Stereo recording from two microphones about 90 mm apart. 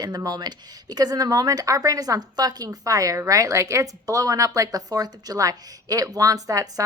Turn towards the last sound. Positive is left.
turn(degrees=-40)  # may be behind; listen again after turning